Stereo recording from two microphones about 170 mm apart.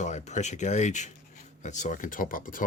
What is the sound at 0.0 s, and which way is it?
Speech, 40° left (ahead or behind).